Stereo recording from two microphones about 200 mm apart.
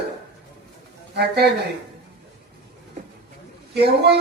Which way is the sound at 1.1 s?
55° right (ahead or behind).